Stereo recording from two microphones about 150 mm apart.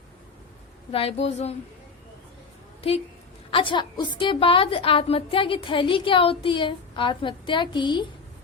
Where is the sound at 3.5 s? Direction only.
35° left (ahead or behind).